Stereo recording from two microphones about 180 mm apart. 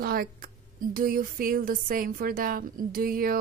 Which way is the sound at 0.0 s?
55° right (ahead or behind).